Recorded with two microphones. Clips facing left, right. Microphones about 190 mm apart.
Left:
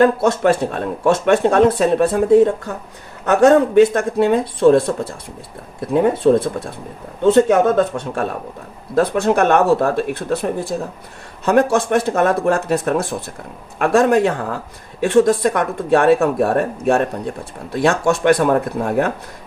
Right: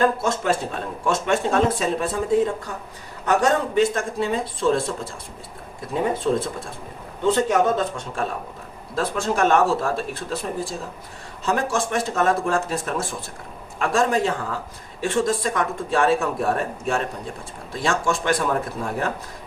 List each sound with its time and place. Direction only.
0.0 s speech: 65° left (ahead or behind)